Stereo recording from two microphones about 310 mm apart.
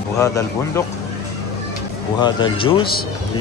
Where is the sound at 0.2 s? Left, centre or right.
Centre.